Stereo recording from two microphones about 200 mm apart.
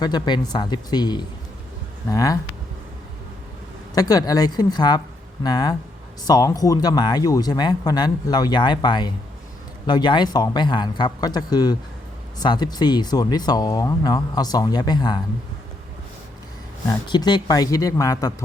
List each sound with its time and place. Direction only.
0.0 s speech: 20° left (ahead or behind)
3.9 s speech: 20° left (ahead or behind)
17.1 s speech: 20° left (ahead or behind)